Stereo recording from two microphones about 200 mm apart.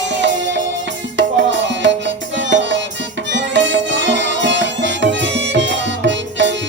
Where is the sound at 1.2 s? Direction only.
65° right (ahead or behind).